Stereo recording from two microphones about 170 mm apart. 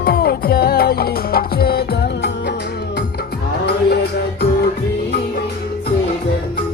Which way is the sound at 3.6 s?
75° left (ahead or behind).